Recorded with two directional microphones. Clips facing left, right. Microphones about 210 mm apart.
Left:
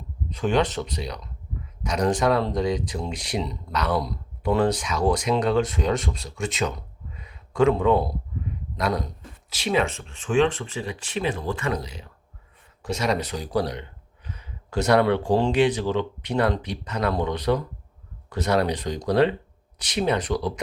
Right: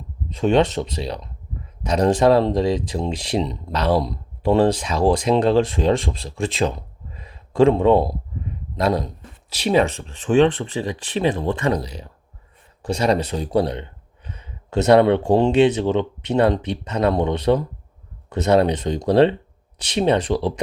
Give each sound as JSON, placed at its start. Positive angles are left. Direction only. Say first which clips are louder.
{"t": 0.3, "sound": "speech", "louder": "right 5 dB", "side_deg": -25}